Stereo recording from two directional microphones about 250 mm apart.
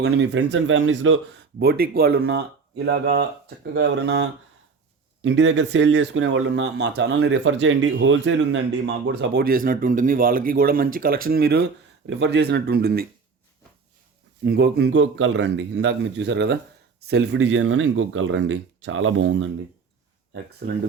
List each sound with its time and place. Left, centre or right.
0.0 s speech: right
14.4 s speech: right
20.6 s speech: right